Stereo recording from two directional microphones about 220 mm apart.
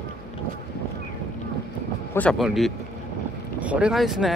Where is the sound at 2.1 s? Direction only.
Centre (ahead or behind).